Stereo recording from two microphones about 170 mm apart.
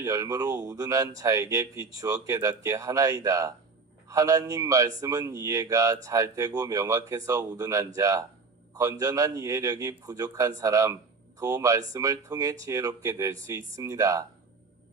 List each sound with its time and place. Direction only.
0.0 s speech: 20° right (ahead or behind)